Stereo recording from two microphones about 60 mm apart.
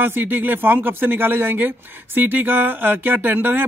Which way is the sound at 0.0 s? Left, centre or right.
Right.